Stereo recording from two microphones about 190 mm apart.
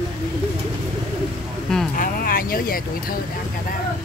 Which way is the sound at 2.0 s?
50° left (ahead or behind).